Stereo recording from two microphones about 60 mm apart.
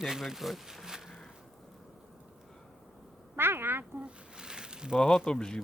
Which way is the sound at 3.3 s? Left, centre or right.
Right.